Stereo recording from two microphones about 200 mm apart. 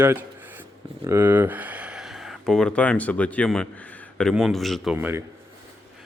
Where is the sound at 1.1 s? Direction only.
10° right (ahead or behind).